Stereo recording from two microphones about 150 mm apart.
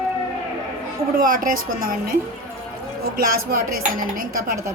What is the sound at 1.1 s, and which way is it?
A woman's voice, 70° right (ahead or behind).